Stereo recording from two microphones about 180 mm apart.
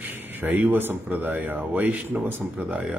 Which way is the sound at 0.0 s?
10° right (ahead or behind).